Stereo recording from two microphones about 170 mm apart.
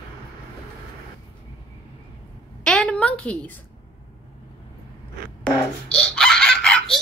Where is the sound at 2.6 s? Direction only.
5° left (ahead or behind).